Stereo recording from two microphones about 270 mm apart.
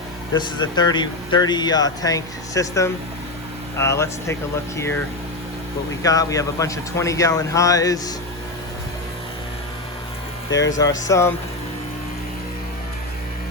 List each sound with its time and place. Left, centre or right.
0.3 s speech: centre
6.0 s speech: centre
10.5 s speech: centre